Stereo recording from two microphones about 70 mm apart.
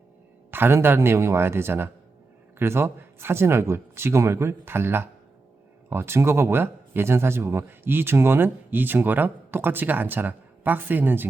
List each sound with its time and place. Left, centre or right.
0.5 s speech: right